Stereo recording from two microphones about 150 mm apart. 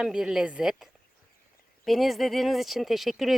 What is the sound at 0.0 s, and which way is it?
Speech, 5° right (ahead or behind).